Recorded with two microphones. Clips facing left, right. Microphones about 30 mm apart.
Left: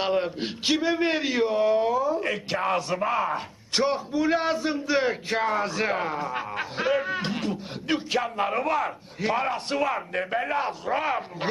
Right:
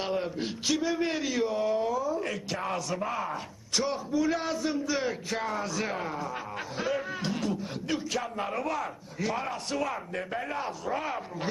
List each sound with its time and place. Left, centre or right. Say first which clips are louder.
0.0 s speech: left 5 dB; left